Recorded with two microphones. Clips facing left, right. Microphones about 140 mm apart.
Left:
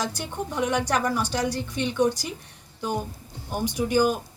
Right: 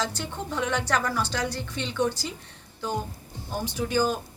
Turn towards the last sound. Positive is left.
turn(degrees=15)  # may be behind; listen again after turning